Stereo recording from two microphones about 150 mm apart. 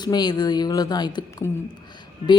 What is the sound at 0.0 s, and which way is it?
Speech, 30° left (ahead or behind).